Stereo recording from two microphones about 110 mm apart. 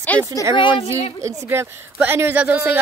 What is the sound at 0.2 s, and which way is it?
Speech, 30° right (ahead or behind).